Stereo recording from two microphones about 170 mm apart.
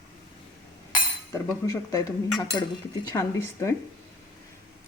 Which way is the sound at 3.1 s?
15° left (ahead or behind).